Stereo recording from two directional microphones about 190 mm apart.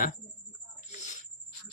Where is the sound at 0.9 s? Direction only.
40° left (ahead or behind).